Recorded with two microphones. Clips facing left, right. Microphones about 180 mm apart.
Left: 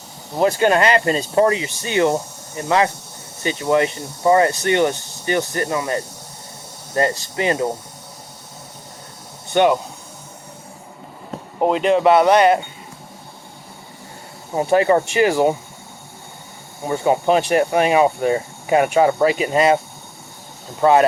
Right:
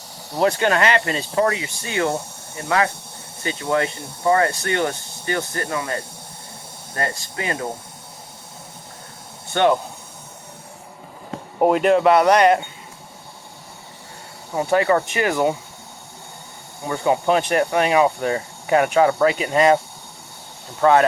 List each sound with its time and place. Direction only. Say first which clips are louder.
0.7 s speech: left 3 dB; 30° left (ahead or behind)
9.5 s speech: left 2 dB; 15° left (ahead or behind)
11.6 s speech: right 1 dB; 5° right (ahead or behind)
14.5 s speech: left 3 dB; 25° left (ahead or behind)
16.8 s speech: left 2 dB; 25° left (ahead or behind)
20.8 s speech: left 1 dB; 15° left (ahead or behind)